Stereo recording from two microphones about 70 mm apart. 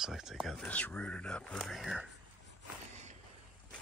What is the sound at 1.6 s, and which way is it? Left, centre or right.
Speech, centre.